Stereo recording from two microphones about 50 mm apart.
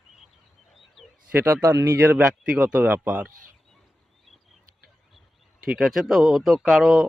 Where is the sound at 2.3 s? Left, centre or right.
Centre.